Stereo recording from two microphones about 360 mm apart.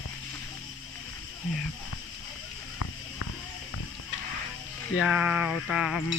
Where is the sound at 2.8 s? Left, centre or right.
Left.